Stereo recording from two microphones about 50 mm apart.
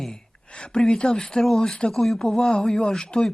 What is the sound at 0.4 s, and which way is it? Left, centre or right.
Speech, centre.